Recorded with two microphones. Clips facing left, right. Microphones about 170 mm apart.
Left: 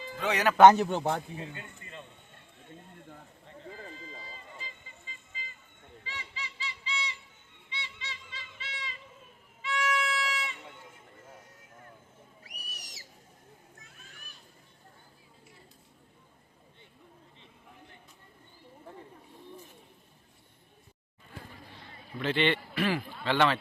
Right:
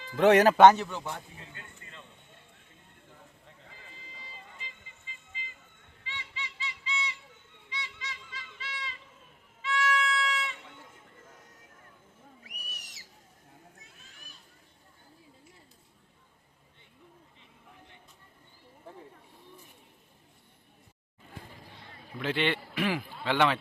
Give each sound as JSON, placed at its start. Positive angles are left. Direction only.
{"t": 0.2, "sound": "a man's voice", "side_deg": -55}
{"t": 0.5, "sound": "a man's voice", "side_deg": -5}
{"t": 0.9, "sound": "a man's voice", "side_deg": 65}
{"t": 1.4, "sound": "speech", "side_deg": 20}
{"t": 3.7, "sound": "run", "side_deg": 45}
{"t": 5.3, "sound": "vehicle", "side_deg": 40}
{"t": 6.1, "sound": "a sound", "side_deg": 40}
{"t": 7.7, "sound": "music", "side_deg": 25}
{"t": 12.4, "sound": "owl", "side_deg": 35}
{"t": 22.2, "sound": "a man's voice", "side_deg": -10}